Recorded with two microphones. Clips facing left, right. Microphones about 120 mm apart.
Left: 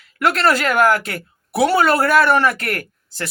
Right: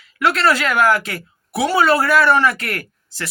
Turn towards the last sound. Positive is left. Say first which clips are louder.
# left 1 dB
turn(degrees=45)  # may be behind; listen again after turning